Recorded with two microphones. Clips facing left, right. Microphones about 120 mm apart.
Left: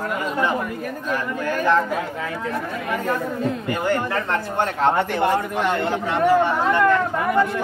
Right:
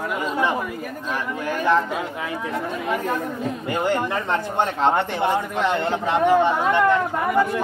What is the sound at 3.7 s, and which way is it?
Speech, 20° right (ahead or behind).